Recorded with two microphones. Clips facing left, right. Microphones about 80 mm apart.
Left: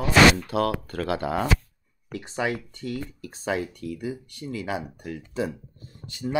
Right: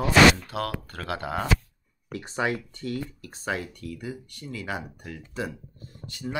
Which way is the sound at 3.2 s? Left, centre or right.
Centre.